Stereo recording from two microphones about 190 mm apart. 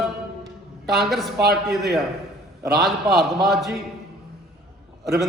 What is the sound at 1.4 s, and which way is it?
Speech, 55° right (ahead or behind).